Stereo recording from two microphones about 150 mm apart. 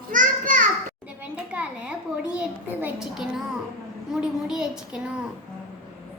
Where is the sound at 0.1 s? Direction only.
60° right (ahead or behind).